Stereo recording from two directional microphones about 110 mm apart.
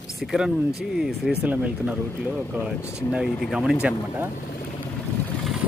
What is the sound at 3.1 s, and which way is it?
Speech, centre (ahead or behind).